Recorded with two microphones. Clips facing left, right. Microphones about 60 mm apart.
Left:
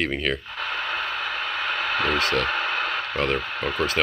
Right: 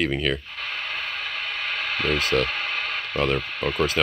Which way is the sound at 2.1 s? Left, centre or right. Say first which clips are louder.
Even; left.